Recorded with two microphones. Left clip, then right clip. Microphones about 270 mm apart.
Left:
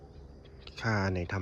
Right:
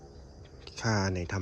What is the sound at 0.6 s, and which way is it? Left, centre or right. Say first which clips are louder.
Speech: right 1 dB; centre.